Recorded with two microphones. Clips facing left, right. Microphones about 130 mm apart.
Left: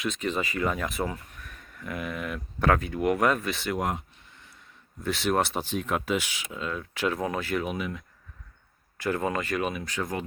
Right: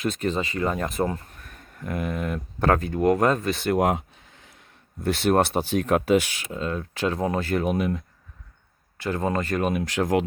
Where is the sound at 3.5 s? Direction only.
50° right (ahead or behind).